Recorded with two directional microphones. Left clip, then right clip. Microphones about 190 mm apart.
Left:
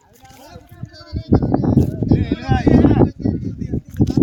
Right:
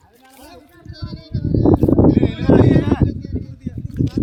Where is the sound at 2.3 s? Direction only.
20° left (ahead or behind).